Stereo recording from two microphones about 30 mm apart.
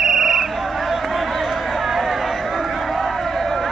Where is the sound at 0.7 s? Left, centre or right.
Centre.